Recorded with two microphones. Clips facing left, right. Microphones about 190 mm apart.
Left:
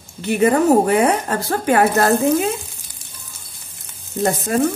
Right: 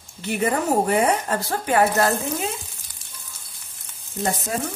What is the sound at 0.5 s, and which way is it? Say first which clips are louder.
Speech: left 7 dB; 65° left (ahead or behind).